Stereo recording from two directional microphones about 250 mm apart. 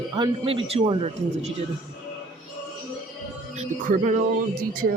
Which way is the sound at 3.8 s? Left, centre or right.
Right.